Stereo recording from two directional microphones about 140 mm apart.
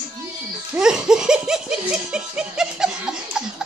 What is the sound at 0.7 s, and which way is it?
Laughter, 5° right (ahead or behind).